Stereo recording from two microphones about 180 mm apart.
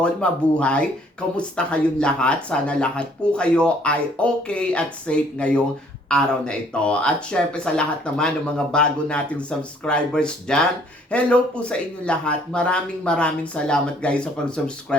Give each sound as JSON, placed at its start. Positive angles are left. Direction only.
{"t": 0.0, "sound": "speech", "side_deg": 5}